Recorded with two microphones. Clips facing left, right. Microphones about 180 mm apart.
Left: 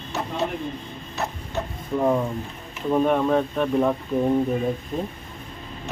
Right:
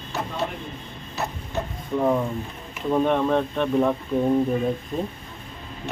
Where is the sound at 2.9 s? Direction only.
5° left (ahead or behind).